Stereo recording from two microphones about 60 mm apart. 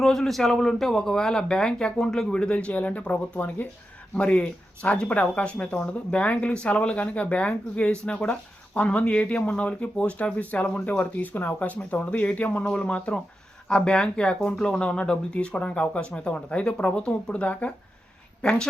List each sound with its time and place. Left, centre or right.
0.0 s speech: centre; by 17.7 s left
18.4 s speech: centre